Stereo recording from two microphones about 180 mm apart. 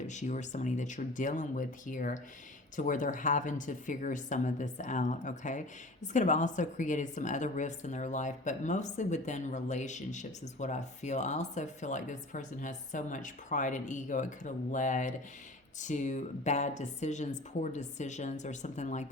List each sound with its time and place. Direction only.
0.0 s a woman's voice: 40° left (ahead or behind)